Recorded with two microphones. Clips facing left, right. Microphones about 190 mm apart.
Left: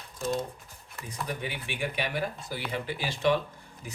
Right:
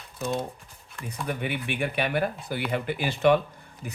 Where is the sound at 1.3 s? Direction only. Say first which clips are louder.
Right 7 dB; 60° right (ahead or behind).